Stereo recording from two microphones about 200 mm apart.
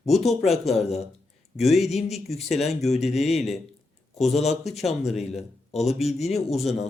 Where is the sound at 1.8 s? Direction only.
35° left (ahead or behind).